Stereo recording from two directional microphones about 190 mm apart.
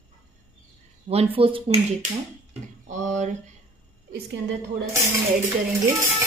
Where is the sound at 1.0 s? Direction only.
30° right (ahead or behind).